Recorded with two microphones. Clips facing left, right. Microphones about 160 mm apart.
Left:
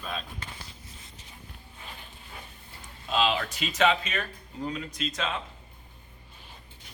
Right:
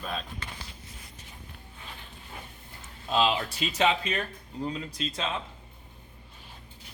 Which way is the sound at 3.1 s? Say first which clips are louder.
Right 1 dB; 35° right (ahead or behind).